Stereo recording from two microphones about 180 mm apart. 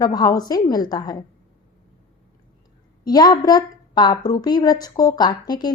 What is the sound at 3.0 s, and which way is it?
A woman's voice, 20° left (ahead or behind).